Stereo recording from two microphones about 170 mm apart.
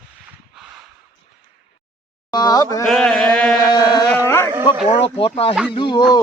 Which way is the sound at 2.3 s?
25° left (ahead or behind).